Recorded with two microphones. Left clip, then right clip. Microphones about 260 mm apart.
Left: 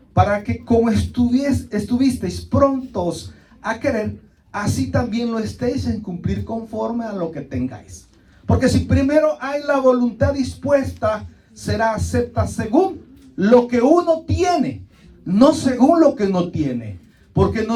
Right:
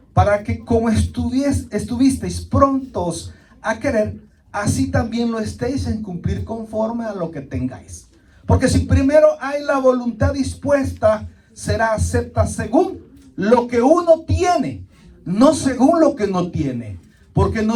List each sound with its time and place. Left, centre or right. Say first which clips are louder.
0.1 s speech: right 1 dB; right